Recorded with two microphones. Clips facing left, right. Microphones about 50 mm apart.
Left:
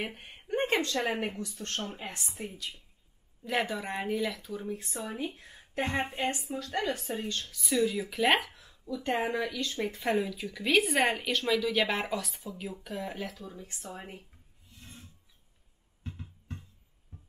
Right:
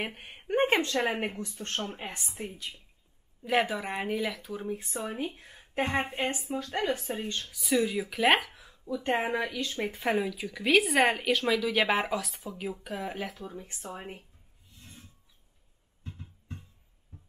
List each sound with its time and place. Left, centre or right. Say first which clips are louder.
0.0 s speech: right 1 dB; centre
0.4 s a woman's voice: right 3 dB; centre
2.5 s a woman's voice: even; right
3.4 s speech: right 4 dB; centre
4.6 s a woman's voice: right 2 dB; centre
7.5 s speech: right 1 dB; centre
8.6 s speech: right 2 dB; centre
13.4 s a woman's voice: right 3 dB; right